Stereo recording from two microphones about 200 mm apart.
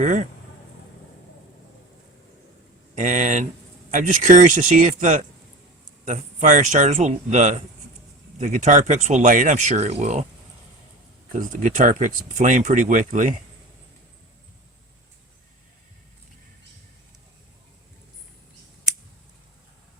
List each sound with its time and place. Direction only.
0.0 s speech: 40° right (ahead or behind)
2.9 s speech: 40° right (ahead or behind)
11.3 s speech: 40° right (ahead or behind)